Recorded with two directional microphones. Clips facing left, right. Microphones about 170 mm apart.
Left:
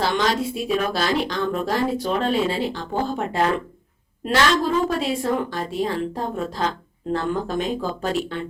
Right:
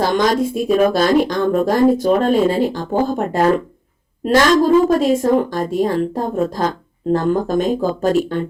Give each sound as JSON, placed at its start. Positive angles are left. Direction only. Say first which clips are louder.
{"t": 0.0, "sound": "a woman's voice", "louder": "right 6 dB", "side_deg": -45}